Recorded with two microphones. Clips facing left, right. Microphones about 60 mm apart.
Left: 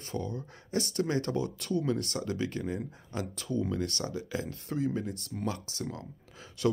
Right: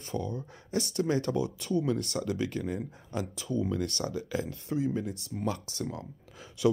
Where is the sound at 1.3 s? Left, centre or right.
Centre.